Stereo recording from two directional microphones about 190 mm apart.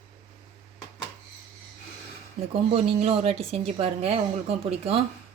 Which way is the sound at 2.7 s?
30° right (ahead or behind).